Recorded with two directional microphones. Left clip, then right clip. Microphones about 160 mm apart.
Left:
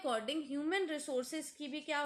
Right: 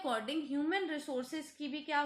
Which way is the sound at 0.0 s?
40° left (ahead or behind).